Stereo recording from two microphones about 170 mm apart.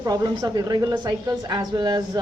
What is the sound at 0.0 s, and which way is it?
A woman's voice, 20° right (ahead or behind).